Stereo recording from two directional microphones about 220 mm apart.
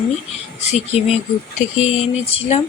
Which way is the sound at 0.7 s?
30° left (ahead or behind).